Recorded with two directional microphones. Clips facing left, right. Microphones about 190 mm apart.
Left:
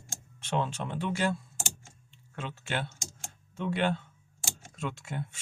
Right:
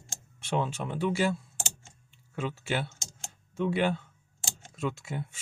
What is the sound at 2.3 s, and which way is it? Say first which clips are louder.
Speech: right 4 dB; 5° right (ahead or behind).